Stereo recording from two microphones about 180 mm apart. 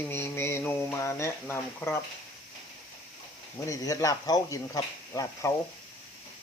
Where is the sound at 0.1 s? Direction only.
15° left (ahead or behind).